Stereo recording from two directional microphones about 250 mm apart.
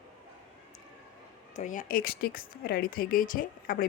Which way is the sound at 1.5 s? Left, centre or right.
Left.